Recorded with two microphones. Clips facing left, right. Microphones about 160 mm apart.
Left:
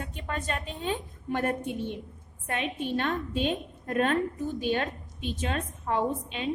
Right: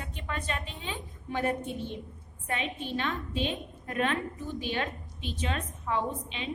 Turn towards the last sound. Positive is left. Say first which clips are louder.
# left 3 dB
turn(degrees=50)  # may be behind; listen again after turning